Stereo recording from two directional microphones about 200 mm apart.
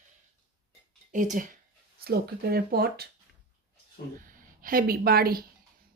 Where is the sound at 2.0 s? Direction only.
50° right (ahead or behind).